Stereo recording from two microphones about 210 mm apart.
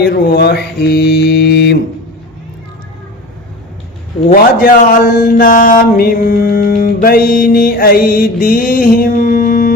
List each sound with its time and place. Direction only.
0.0 s speech: 50° left (ahead or behind)
4.3 s speech: 40° left (ahead or behind)